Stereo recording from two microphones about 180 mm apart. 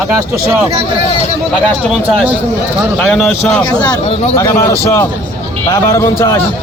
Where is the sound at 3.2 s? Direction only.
5° left (ahead or behind).